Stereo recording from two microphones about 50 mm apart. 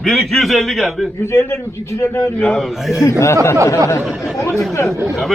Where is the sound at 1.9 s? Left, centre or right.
Left.